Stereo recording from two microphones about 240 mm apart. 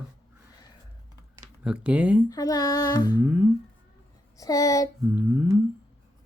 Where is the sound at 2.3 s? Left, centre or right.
Centre.